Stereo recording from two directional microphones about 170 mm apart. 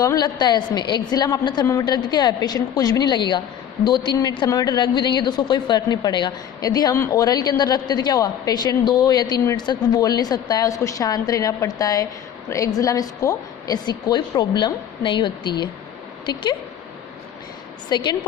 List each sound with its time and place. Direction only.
0.0 s a woman's voice: 25° left (ahead or behind)
17.8 s a woman's voice: 25° left (ahead or behind)